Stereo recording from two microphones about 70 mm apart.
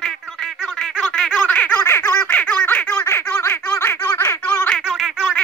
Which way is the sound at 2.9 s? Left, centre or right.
Left.